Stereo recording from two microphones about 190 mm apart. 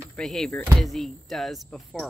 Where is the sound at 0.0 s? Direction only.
5° left (ahead or behind).